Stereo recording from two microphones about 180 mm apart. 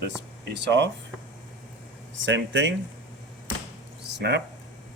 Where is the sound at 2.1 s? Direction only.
90° right.